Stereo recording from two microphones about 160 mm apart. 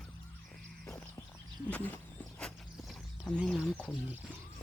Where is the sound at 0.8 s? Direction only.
15° left (ahead or behind).